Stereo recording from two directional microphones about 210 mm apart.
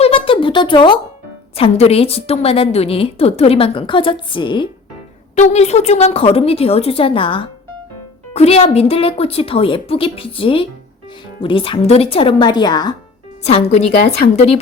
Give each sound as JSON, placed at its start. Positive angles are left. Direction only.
{"t": 0.0, "sound": "a sound", "side_deg": 25}
{"t": 1.5, "sound": "a woman's voice", "side_deg": 30}
{"t": 13.4, "sound": "a woman's voice", "side_deg": 30}